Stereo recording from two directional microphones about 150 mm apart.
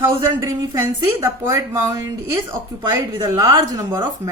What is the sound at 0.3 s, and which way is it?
Speech, 25° right (ahead or behind).